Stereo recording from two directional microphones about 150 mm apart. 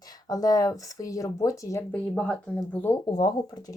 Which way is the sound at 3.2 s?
30° left (ahead or behind).